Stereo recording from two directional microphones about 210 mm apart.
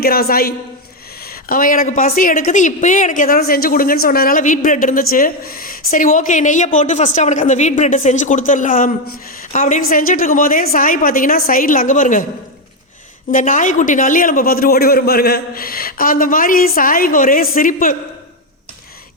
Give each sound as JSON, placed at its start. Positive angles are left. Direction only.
{"t": 0.0, "sound": "a woman's voice", "side_deg": 45}
{"t": 13.3, "sound": "speech", "side_deg": 40}